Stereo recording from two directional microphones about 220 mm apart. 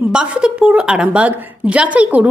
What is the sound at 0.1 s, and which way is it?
A woman's voice, 5° right (ahead or behind).